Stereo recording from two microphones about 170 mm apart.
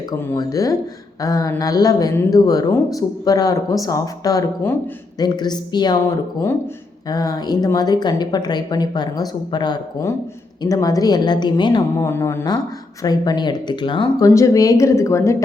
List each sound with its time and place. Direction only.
0.2 s a woman's voice: 20° left (ahead or behind)
7.1 s a woman's voice: 20° left (ahead or behind)
12.0 s a woman's voice: 15° left (ahead or behind)